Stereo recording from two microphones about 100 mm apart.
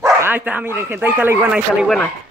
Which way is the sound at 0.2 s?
20° right (ahead or behind).